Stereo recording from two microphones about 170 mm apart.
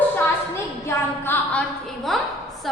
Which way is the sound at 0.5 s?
15° left (ahead or behind).